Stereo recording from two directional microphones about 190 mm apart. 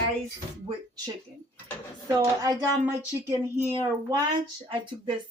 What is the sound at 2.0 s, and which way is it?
Speech, 20° right (ahead or behind).